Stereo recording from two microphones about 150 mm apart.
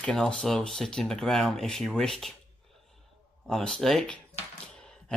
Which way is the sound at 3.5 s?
5° left (ahead or behind).